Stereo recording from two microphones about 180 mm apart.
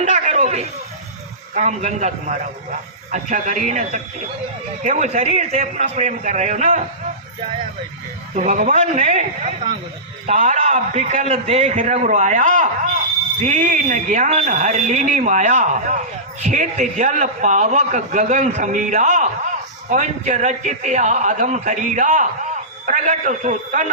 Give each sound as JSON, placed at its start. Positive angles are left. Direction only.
{"t": 0.0, "sound": "a sound", "side_deg": -40}
{"t": 1.5, "sound": "a man's voice", "side_deg": -40}
{"t": 8.4, "sound": "a man's voice", "side_deg": -45}